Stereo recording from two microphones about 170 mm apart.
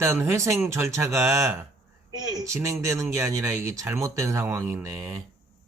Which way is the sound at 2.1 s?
25° right (ahead or behind).